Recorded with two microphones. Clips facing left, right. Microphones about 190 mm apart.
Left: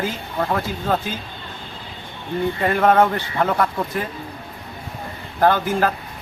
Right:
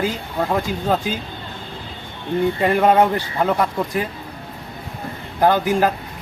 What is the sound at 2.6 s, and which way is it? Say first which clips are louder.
Speech: even; 10° right (ahead or behind).